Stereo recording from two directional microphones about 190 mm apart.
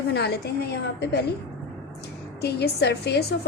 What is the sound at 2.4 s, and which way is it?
Speech, 60° left (ahead or behind).